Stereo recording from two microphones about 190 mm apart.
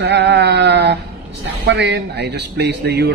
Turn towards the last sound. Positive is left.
turn(degrees=-60)  # may be behind; listen again after turning